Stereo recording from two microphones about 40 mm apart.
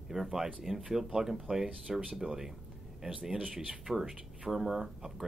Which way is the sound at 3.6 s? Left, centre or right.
Right.